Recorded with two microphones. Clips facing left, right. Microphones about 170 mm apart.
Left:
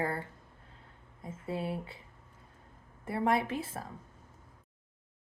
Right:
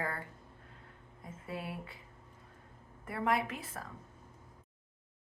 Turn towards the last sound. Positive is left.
turn(degrees=30)  # may be behind; listen again after turning